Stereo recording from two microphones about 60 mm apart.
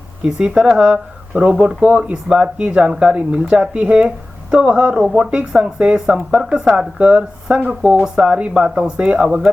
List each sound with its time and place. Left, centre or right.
0.2 s speech: centre